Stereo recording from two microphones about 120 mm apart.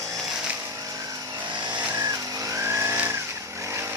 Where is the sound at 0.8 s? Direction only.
30° right (ahead or behind).